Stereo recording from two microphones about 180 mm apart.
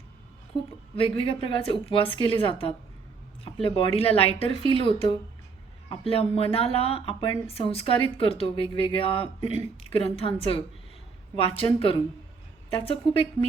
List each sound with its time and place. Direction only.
0.9 s speech: 30° left (ahead or behind)